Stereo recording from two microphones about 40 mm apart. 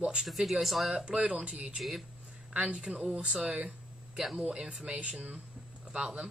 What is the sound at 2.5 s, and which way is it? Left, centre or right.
Speech, right.